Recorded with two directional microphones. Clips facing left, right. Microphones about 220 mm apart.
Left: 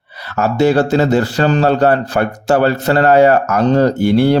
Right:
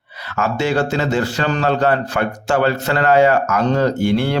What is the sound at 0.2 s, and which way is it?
A man's voice, 40° left (ahead or behind).